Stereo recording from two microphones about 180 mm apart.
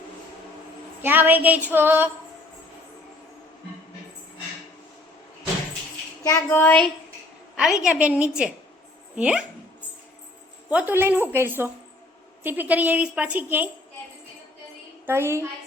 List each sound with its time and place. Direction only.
1.0 s a woman's voice: 10° right (ahead or behind)
6.2 s child singing: 15° left (ahead or behind)
7.5 s a woman's voice: 5° right (ahead or behind)
10.7 s a woman's voice: 10° right (ahead or behind)
15.0 s a woman's voice: 15° right (ahead or behind)